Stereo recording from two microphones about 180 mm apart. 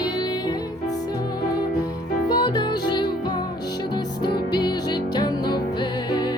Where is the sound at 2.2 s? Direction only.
25° left (ahead or behind).